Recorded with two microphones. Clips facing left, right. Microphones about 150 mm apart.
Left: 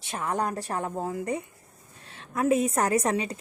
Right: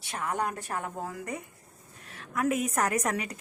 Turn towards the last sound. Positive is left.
turn(degrees=30)  # may be behind; listen again after turning